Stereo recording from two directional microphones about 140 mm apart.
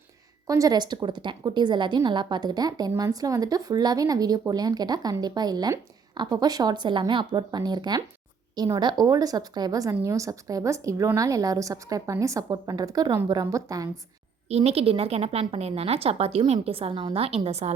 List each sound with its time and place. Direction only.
0.4 s a woman's voice: 25° right (ahead or behind)
14.5 s a woman's voice: 50° right (ahead or behind)